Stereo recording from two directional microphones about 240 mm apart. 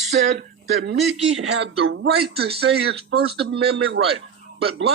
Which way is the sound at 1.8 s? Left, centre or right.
Right.